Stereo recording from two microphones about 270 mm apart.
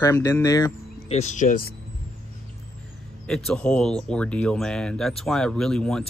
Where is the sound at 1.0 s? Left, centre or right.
Left.